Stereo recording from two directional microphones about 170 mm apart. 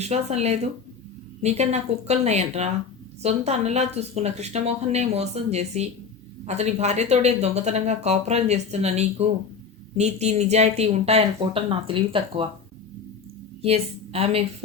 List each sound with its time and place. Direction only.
0.0 s speech: 40° right (ahead or behind)
13.6 s a woman's voice: 35° right (ahead or behind)